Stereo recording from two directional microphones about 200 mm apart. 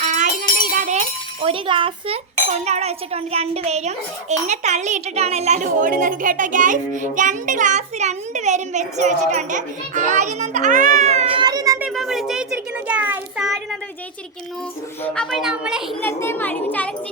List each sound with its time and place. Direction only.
0.0 s music: 35° right (ahead or behind)
0.8 s a child's voice: 35° right (ahead or behind)
11.4 s a sound: 20° right (ahead or behind)
11.8 s a child's voice: centre (ahead or behind)
15.0 s a child's voice: 5° left (ahead or behind)
16.0 s a child's voice: 10° left (ahead or behind)